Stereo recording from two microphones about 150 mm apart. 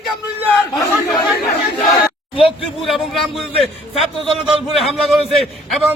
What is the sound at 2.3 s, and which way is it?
Speech, 40° left (ahead or behind).